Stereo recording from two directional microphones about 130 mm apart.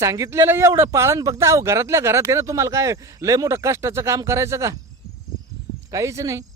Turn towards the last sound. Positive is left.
turn(degrees=-25)  # may be behind; listen again after turning